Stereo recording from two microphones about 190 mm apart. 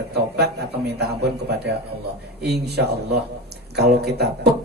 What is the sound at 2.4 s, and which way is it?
Speech, 60° right (ahead or behind).